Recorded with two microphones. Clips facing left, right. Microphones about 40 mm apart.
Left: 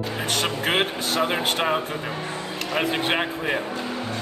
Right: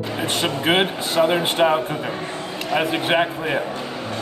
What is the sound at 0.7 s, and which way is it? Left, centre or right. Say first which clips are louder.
Speech: right 5 dB; centre.